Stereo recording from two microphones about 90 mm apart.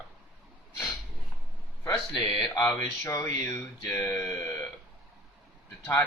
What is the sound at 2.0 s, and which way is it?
Speech, 5° left (ahead or behind).